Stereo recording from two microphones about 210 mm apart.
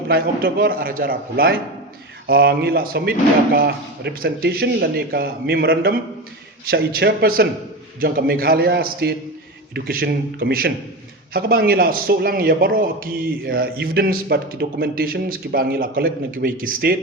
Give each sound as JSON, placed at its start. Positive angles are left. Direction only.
{"t": 0.1, "sound": "a man's voice", "side_deg": -45}